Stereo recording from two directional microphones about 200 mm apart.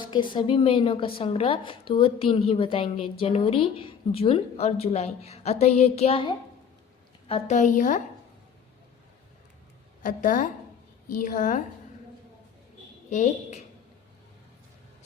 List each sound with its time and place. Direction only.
0.0 s a sound: 25° left (ahead or behind)
0.3 s a woman's voice: 30° left (ahead or behind)
10.0 s a woman's voice: 40° left (ahead or behind)
13.1 s a woman's voice: 35° left (ahead or behind)